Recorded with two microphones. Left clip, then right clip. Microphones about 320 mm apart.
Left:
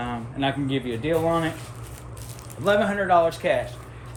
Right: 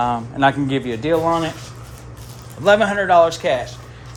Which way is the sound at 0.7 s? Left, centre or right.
Centre.